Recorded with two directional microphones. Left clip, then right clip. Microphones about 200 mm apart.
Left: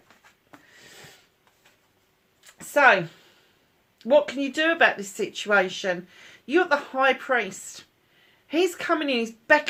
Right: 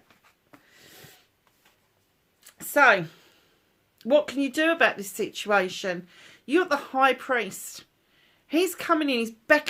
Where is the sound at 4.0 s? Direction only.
50° right (ahead or behind).